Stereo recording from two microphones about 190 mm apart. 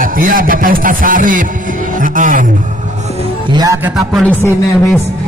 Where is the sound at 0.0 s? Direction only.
45° right (ahead or behind).